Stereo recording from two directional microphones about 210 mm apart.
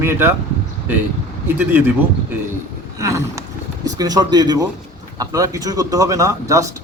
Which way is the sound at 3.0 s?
15° right (ahead or behind).